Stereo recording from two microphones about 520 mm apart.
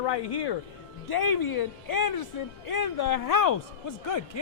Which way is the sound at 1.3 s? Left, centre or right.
Left.